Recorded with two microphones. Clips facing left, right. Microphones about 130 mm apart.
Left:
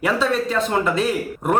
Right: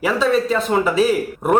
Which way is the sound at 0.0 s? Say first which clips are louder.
Right 3 dB; centre (ahead or behind).